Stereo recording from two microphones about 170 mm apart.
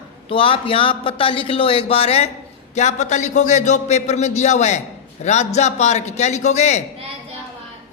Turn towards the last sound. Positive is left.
turn(degrees=40)  # may be behind; listen again after turning